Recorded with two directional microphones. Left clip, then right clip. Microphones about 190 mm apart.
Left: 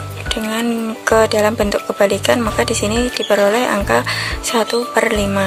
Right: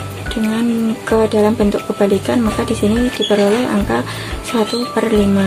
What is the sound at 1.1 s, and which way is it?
Speech, 55° left (ahead or behind).